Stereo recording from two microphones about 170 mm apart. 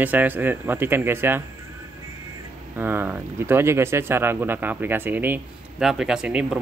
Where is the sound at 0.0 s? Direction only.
10° right (ahead or behind).